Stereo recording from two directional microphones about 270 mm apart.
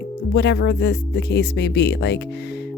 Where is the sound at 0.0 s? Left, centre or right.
Left.